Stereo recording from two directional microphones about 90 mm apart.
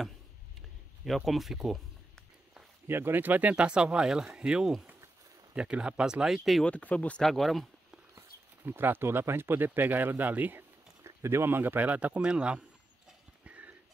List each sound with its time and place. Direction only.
1.0 s speech: centre (ahead or behind)
2.5 s speech: 25° right (ahead or behind); by 6.6 s centre (ahead or behind)
6.6 s speech: 15° left (ahead or behind)
7.2 s speech: centre (ahead or behind)
8.6 s speech: 20° right (ahead or behind)
13.5 s a sound: 15° right (ahead or behind)